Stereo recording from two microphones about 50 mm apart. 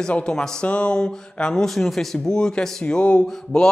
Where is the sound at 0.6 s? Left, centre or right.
Left.